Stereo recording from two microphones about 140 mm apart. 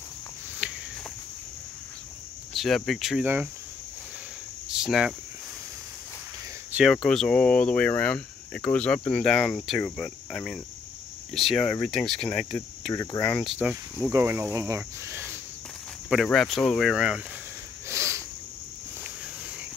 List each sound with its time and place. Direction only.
0.6 s cricket: 10° right (ahead or behind)
2.5 s cricket: centre (ahead or behind)
4.6 s cricket: 5° right (ahead or behind)
6.7 s speech: centre (ahead or behind)
11.3 s cricket: centre (ahead or behind)
12.9 s speech: 25° left (ahead or behind)
13.6 s speech: 5° right (ahead or behind)
16.1 s cricket: centre (ahead or behind)
17.8 s a sound: 20° right (ahead or behind)